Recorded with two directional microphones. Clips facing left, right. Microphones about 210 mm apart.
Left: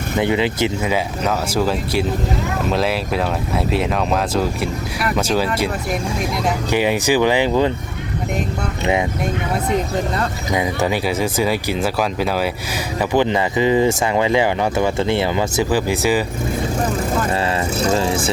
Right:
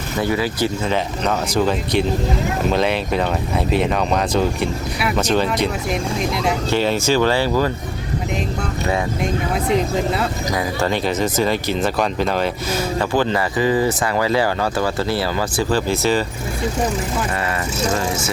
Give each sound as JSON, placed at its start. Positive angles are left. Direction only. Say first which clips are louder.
{"t": 0.2, "sound": "speech", "louder": "left 2 dB", "side_deg": 20}
{"t": 0.9, "sound": "speech", "louder": "even", "side_deg": 5}
{"t": 10.5, "sound": "speech", "louder": "left 3 dB", "side_deg": 20}